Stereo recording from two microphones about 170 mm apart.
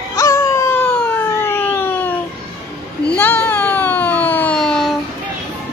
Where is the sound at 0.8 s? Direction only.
10° left (ahead or behind).